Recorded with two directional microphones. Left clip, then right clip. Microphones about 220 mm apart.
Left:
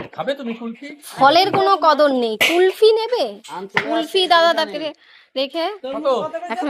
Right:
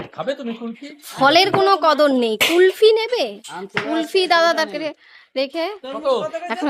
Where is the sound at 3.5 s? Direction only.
5° left (ahead or behind).